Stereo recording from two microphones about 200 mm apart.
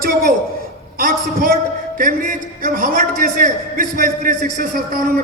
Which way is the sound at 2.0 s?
40° right (ahead or behind).